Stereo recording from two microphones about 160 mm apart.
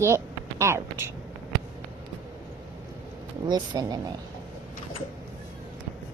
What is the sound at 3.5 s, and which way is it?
Speech, 25° right (ahead or behind).